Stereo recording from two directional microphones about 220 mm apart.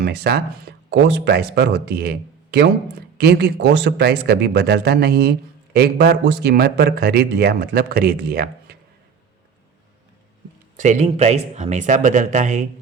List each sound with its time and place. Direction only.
0.0 s speech: 45° right (ahead or behind)
10.8 s speech: 35° right (ahead or behind)